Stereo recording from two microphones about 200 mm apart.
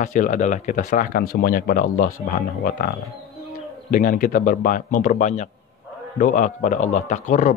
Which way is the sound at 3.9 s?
40° left (ahead or behind).